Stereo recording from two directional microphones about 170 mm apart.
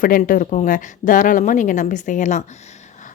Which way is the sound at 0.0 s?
55° left (ahead or behind).